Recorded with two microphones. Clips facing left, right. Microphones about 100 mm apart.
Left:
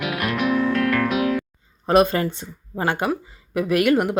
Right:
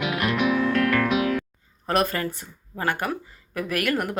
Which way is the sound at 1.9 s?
20° left (ahead or behind).